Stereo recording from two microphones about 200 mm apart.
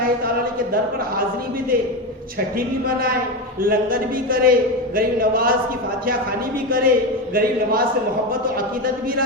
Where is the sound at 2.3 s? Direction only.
45° right (ahead or behind).